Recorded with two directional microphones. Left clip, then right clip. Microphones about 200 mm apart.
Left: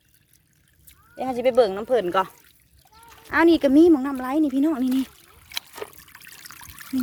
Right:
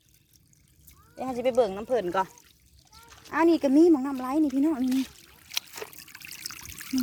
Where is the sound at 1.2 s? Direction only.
20° left (ahead or behind).